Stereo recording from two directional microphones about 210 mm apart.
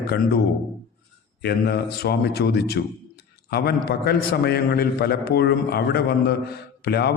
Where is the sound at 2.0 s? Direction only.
50° left (ahead or behind).